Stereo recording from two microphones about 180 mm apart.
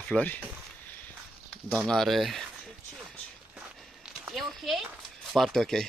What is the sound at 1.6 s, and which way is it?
Speech, 5° left (ahead or behind).